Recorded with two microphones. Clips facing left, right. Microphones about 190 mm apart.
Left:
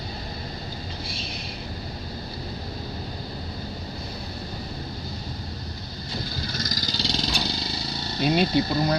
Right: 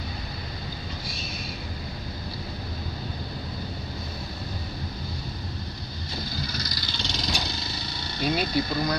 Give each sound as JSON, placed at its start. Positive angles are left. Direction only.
{"t": 6.5, "sound": "vehicle", "side_deg": 45}